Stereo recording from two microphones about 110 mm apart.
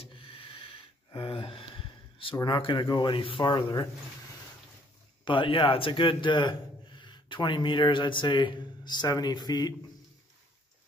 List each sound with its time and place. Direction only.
0.0 s a sound: 55° left (ahead or behind)
2.4 s a man's voice: 45° left (ahead or behind)
5.2 s a man's voice: 50° left (ahead or behind)